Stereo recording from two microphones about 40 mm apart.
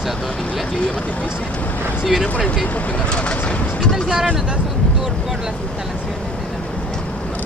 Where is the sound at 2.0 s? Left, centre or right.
Centre.